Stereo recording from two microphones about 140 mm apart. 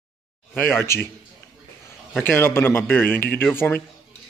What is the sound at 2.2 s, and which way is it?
Speech, 15° left (ahead or behind).